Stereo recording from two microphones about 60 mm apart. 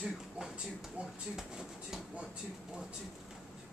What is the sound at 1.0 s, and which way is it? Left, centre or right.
Speech, right.